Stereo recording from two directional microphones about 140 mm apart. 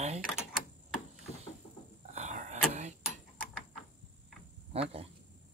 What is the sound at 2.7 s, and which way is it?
Clock, 55° right (ahead or behind).